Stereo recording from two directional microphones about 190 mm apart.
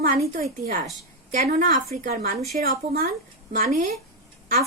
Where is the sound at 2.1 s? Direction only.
50° right (ahead or behind).